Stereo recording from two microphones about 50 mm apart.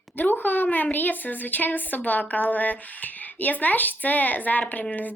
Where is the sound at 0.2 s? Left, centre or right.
Left.